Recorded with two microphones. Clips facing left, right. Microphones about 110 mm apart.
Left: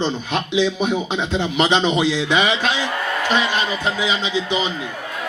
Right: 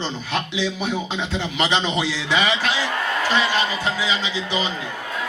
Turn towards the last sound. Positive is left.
turn(degrees=20)  # may be behind; listen again after turning